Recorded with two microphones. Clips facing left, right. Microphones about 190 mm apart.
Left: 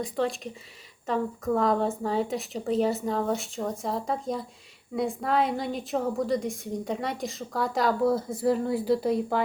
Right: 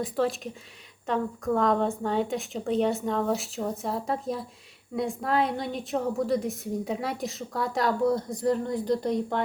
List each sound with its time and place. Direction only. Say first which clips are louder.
0.0 s a woman's voice: right 1 dB; centre (ahead or behind)